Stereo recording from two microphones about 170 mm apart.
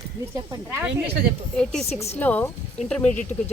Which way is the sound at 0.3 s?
15° right (ahead or behind).